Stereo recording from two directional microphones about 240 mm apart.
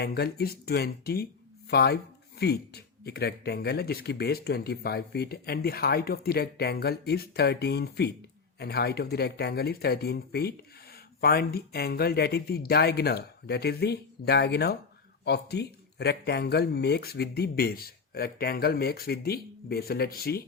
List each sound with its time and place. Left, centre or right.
0.0 s speech: left